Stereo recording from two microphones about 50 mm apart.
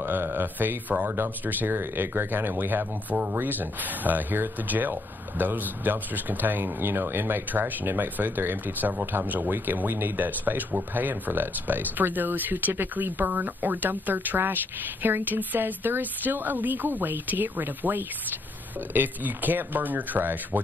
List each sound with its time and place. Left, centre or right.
0.0 s speech: right